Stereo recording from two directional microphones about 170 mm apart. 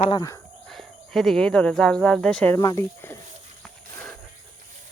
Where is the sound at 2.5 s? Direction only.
20° left (ahead or behind).